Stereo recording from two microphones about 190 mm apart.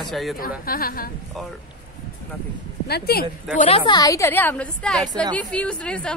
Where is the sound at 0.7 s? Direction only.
50° left (ahead or behind).